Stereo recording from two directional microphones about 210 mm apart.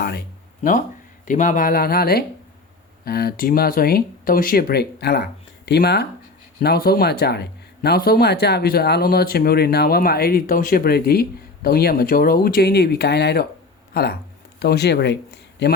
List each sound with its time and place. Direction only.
1.2 s speech: 35° left (ahead or behind); by 15.7 s 55° left (ahead or behind)